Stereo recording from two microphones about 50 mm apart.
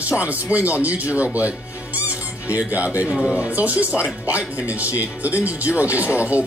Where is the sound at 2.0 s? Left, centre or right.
Right.